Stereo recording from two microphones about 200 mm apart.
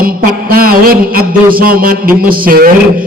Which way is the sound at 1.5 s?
45° right (ahead or behind).